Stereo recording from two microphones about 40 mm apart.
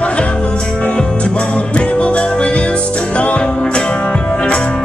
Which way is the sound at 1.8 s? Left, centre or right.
Left.